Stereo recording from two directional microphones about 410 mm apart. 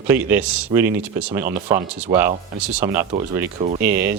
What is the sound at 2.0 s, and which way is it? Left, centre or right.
Speech, centre.